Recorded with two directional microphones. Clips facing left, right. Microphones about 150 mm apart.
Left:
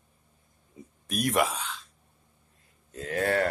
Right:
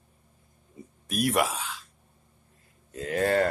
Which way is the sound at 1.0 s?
Centre (ahead or behind).